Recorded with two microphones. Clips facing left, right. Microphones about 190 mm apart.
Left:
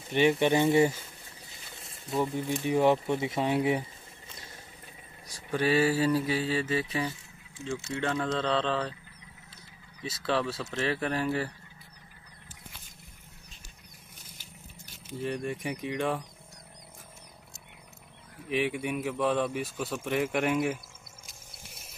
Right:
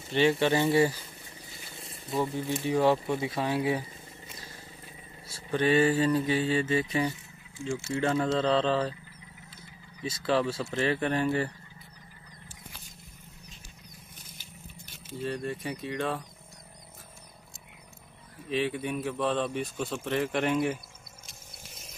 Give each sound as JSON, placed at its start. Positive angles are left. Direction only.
{"t": 0.1, "sound": "speech", "side_deg": 15}
{"t": 1.8, "sound": "speech", "side_deg": 0}
{"t": 2.6, "sound": "speech", "side_deg": 20}
{"t": 5.3, "sound": "mantra", "side_deg": 10}
{"t": 10.0, "sound": "mantra", "side_deg": 0}
{"t": 15.0, "sound": "a man's voice", "side_deg": 15}
{"t": 18.5, "sound": "a man's voice", "side_deg": 15}